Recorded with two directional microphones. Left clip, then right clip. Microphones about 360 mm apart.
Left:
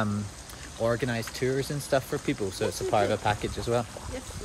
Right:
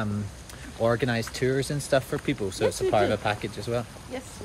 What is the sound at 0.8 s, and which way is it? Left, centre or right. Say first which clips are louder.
Speech: right 3 dB; centre.